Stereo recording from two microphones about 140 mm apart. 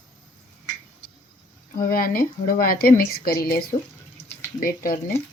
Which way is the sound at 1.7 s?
90° left.